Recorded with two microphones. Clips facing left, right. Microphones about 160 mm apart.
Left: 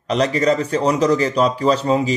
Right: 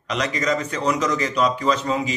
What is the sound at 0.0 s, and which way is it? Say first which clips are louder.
Speech: left 7 dB; 35° left (ahead or behind).